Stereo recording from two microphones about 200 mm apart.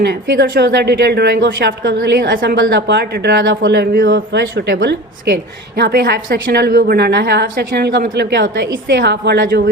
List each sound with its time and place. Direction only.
0.0 s speech: 55° right (ahead or behind)